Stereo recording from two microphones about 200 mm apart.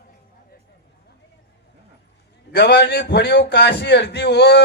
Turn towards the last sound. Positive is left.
turn(degrees=55)  # may be behind; listen again after turning